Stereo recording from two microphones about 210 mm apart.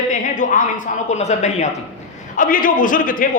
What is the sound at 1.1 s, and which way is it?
A man's voice, 35° left (ahead or behind).